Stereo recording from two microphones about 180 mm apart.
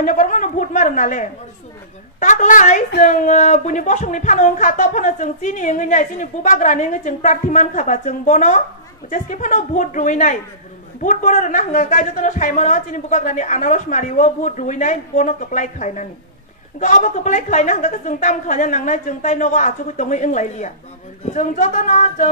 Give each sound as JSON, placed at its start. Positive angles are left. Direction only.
{"t": 0.0, "sound": "speech", "side_deg": 45}